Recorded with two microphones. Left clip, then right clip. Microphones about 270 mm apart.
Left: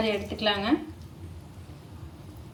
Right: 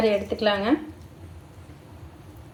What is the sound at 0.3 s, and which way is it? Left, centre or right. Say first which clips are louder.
Speech: right 4 dB; centre.